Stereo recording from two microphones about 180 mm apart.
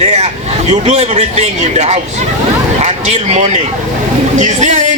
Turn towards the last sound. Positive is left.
turn(degrees=-40)  # may be behind; listen again after turning